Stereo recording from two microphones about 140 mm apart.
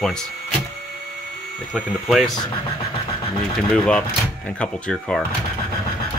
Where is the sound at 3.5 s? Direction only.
5° left (ahead or behind).